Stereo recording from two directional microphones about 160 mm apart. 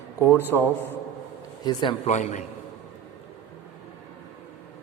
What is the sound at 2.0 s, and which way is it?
Speech, 45° left (ahead or behind).